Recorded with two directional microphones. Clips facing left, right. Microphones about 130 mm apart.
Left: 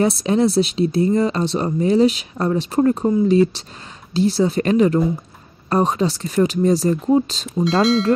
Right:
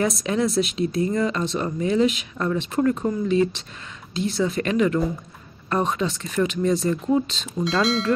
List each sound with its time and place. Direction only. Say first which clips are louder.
0.0 s speech: left 6 dB; 30° left (ahead or behind)